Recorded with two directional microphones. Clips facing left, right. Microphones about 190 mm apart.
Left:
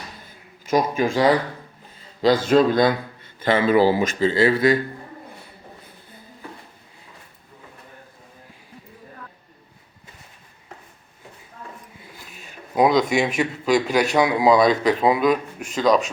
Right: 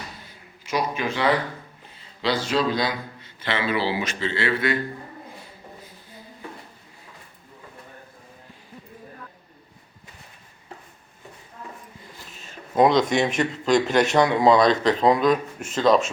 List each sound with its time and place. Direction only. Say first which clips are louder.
0.3 s a sound: left 8 dB; 45° left (ahead or behind)
2.2 s a man's voice: left 7 dB; 50° left (ahead or behind)
12.7 s a man's voice: even; centre (ahead or behind)